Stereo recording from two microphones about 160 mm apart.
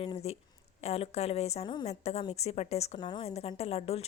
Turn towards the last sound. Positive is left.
turn(degrees=40)  # may be behind; listen again after turning